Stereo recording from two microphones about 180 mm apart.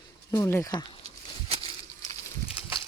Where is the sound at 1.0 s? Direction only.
35° right (ahead or behind).